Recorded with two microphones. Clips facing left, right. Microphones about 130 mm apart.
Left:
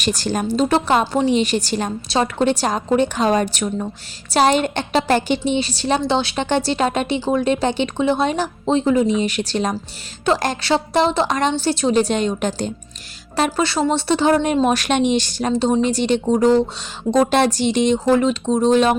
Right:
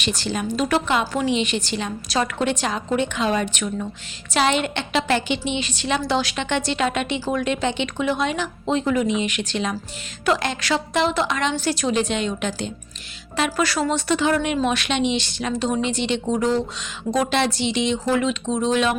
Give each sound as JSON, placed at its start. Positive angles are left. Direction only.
{"t": 0.2, "sound": "a woman's voice", "side_deg": 45}
{"t": 0.5, "sound": "speech", "side_deg": 30}
{"t": 2.0, "sound": "speech", "side_deg": 30}